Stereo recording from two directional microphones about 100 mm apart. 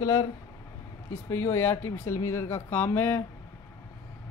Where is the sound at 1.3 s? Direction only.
25° left (ahead or behind).